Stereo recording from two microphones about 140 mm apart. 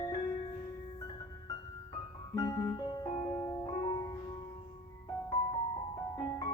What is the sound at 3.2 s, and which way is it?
Music, 20° left (ahead or behind).